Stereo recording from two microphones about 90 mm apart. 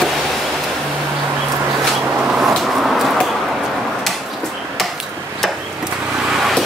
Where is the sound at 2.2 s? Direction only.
5° right (ahead or behind).